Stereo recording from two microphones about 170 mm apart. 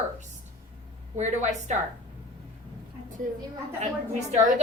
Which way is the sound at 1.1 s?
40° right (ahead or behind).